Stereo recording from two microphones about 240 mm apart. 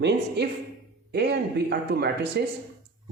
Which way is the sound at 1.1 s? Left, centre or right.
Right.